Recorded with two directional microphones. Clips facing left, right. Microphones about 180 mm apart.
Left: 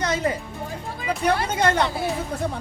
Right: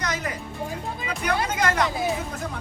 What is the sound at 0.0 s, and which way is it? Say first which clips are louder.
Music: left 6 dB; 30° left (ahead or behind).